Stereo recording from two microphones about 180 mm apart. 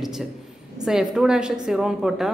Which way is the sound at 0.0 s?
Centre (ahead or behind).